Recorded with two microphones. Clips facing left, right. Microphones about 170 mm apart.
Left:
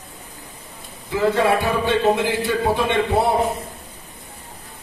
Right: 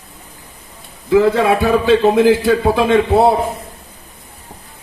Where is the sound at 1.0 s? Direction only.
90° right.